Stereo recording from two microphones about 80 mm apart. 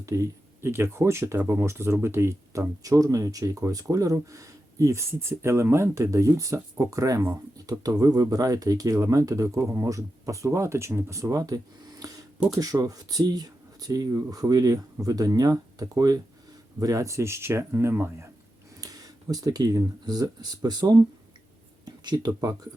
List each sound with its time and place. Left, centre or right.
0.0 s speech: right
18.8 s speech: right